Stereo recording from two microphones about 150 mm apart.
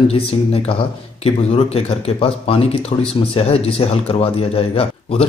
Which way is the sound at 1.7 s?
35° left (ahead or behind).